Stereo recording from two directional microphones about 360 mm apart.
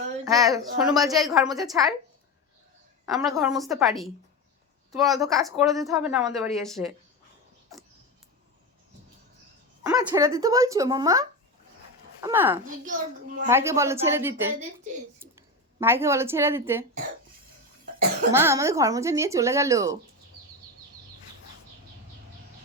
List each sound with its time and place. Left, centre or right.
0.3 s speech: centre
3.1 s a woman's voice: centre
9.8 s a woman's voice: centre
12.6 s a child's voice: right
13.5 s speech: centre
18.3 s speech: centre